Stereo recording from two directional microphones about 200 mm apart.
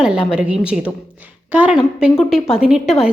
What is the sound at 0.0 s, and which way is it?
A woman's voice, 5° right (ahead or behind).